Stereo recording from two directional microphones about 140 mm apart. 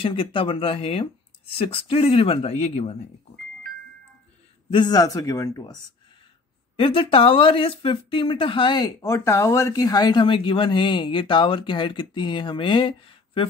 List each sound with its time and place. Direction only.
0.0 s speech: 40° left (ahead or behind)
4.6 s a man's voice: 30° left (ahead or behind)
6.8 s speech: 40° left (ahead or behind)